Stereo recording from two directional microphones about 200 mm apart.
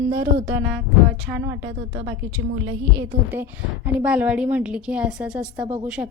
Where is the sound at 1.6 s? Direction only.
65° right (ahead or behind).